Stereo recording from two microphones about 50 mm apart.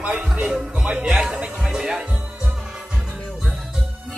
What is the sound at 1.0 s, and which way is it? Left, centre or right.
Music, centre.